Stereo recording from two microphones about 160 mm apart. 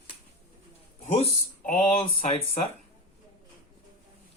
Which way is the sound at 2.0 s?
35° left (ahead or behind).